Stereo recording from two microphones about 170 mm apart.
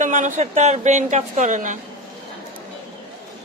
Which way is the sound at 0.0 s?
45° right (ahead or behind).